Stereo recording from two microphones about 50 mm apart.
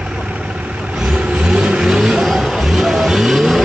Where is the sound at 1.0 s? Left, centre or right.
Centre.